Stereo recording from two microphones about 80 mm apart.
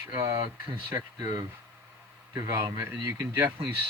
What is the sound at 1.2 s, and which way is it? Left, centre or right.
Speech, right.